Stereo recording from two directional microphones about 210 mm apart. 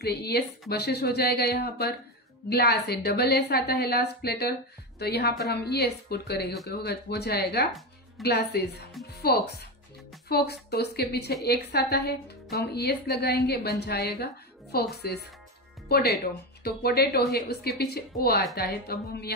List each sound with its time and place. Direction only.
0.0 s a woman's voice: 50° left (ahead or behind)